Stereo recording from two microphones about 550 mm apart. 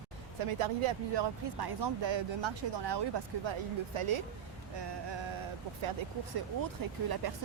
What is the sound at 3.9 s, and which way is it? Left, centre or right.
Speech, right.